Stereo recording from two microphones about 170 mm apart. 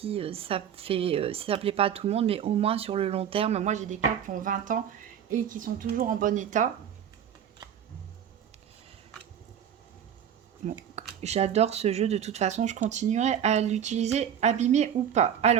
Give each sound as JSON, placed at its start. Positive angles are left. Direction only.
{"t": 0.0, "sound": "speech", "side_deg": -35}
{"t": 10.9, "sound": "speech", "side_deg": -40}